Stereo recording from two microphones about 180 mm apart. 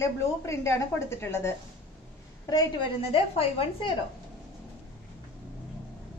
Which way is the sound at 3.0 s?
30° left (ahead or behind).